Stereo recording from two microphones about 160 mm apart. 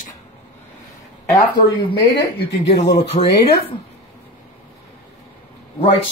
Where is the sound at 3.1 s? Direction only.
30° left (ahead or behind).